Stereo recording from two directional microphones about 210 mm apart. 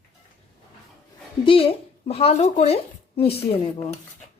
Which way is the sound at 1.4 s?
25° left (ahead or behind).